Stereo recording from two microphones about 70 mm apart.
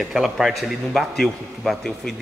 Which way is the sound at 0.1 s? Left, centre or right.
Centre.